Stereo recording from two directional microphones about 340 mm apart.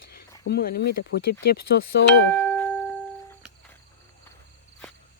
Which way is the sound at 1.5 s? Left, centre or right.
Left.